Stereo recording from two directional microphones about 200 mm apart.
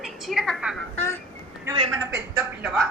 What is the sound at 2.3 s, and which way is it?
Speech, 5° right (ahead or behind).